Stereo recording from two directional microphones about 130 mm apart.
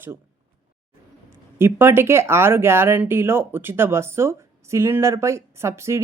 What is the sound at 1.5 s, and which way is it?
Speech, 15° right (ahead or behind).